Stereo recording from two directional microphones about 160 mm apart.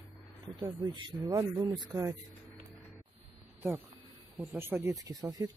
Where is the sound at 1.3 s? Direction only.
15° right (ahead or behind).